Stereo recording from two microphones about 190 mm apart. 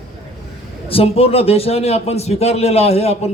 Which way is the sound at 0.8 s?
30° left (ahead or behind).